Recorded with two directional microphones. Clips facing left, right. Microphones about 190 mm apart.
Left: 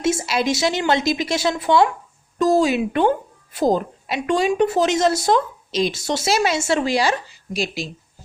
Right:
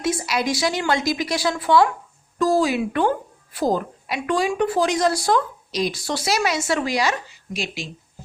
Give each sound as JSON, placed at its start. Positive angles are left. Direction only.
{"t": 0.0, "sound": "a woman's voice", "side_deg": 25}